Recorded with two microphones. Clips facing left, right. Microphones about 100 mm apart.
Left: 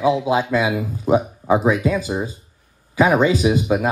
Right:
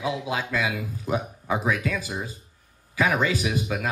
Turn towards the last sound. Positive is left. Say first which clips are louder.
# left 9 dB
turn(degrees=25)  # may be behind; listen again after turning